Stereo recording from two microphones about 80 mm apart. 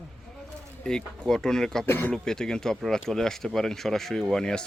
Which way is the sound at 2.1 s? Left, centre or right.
Centre.